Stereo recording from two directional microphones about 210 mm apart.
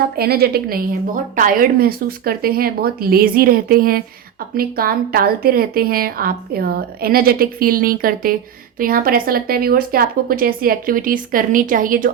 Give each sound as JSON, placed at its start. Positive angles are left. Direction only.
{"t": 0.2, "sound": "speech", "side_deg": -50}